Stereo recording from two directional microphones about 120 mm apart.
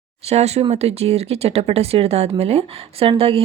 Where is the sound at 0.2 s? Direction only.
60° right (ahead or behind).